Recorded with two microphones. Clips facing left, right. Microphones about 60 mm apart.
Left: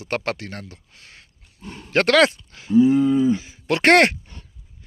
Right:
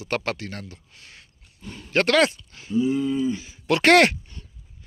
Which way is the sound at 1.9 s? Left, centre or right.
Left.